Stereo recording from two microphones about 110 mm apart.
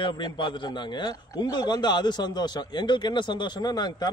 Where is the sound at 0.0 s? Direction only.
45° left (ahead or behind).